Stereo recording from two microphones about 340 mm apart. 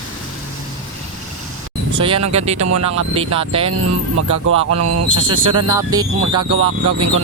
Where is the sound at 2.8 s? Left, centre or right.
Right.